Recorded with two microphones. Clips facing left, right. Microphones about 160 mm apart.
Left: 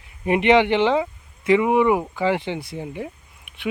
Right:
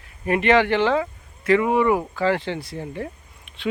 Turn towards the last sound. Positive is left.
turn(degrees=15)  # may be behind; listen again after turning